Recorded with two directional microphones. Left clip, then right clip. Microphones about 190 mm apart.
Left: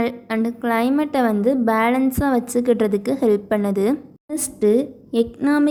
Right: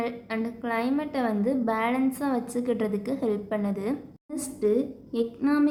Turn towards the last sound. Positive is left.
turn(degrees=40)  # may be behind; listen again after turning